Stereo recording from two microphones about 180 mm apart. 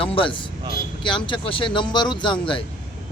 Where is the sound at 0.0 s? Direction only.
30° left (ahead or behind).